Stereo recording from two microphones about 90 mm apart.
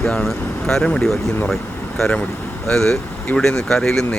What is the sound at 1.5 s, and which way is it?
Air conditioning, centre (ahead or behind).